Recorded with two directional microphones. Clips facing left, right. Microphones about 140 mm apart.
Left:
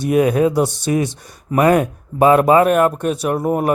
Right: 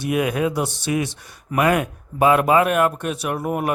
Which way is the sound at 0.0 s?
40° left (ahead or behind).